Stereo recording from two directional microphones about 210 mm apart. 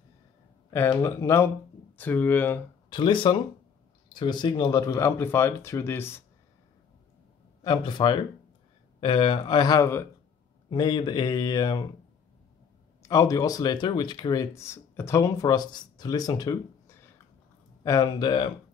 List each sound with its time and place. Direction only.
0.7 s speech: 15° left (ahead or behind)
2.9 s speech: 25° left (ahead or behind)
7.6 s speech: 20° left (ahead or behind)
13.0 s speech: 15° left (ahead or behind)